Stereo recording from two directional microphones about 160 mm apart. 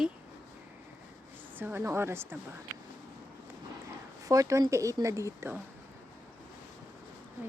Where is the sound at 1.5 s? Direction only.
10° right (ahead or behind).